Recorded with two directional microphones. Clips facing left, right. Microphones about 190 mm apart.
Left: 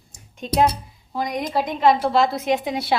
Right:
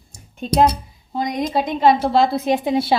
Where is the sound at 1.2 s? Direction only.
25° right (ahead or behind).